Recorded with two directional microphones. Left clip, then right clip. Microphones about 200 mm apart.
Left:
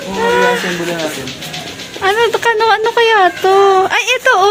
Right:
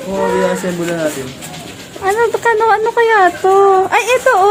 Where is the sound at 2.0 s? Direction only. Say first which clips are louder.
Left 1 dB; centre (ahead or behind).